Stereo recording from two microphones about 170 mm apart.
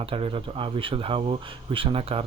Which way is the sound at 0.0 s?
30° right (ahead or behind).